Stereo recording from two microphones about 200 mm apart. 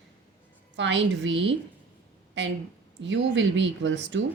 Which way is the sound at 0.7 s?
60° right (ahead or behind).